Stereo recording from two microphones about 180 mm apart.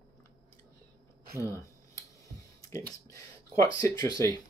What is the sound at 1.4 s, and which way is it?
Finger snapping, 15° left (ahead or behind).